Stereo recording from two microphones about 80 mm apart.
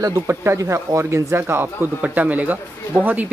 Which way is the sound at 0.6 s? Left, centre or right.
Right.